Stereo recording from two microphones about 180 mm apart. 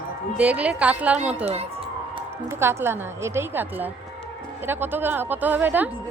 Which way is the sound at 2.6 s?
15° right (ahead or behind).